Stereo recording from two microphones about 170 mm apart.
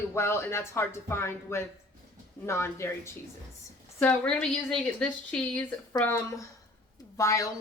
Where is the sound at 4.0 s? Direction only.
5° left (ahead or behind).